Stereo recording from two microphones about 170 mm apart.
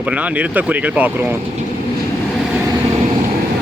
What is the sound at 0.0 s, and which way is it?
Speech, 10° right (ahead or behind).